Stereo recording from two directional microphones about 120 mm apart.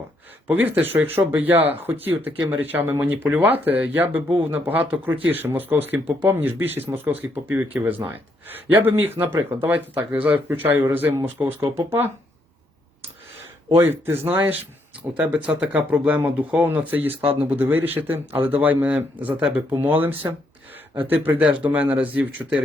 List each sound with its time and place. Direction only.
0.4 s speech: 15° right (ahead or behind)
13.7 s speech: 20° right (ahead or behind)